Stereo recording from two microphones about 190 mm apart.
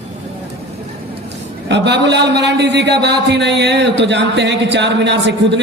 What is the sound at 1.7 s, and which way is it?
A man's voice, 65° right (ahead or behind).